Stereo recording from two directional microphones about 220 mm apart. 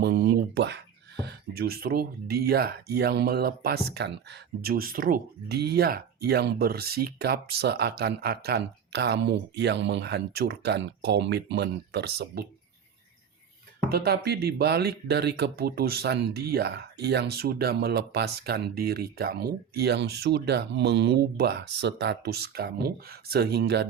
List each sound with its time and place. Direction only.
0.0 s a sound: 50° right (ahead or behind)
1.2 s speech: 45° right (ahead or behind)
13.9 s speech: 45° right (ahead or behind)